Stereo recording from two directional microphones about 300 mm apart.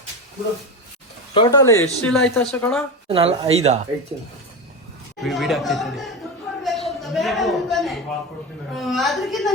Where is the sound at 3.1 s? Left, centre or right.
Centre.